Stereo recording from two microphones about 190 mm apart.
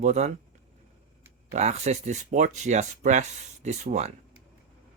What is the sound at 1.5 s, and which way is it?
Speech, 35° right (ahead or behind).